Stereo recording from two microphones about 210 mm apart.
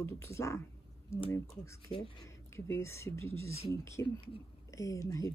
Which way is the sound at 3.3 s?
80° left.